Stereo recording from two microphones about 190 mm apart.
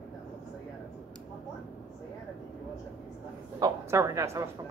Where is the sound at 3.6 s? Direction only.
15° right (ahead or behind).